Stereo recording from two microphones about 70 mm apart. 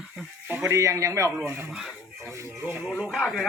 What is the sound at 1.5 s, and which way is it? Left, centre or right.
Speech, right.